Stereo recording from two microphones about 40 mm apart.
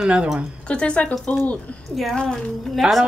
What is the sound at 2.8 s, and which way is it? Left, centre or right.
Speech, centre.